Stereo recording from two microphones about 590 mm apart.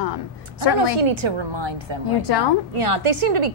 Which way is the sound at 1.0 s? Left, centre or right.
Right.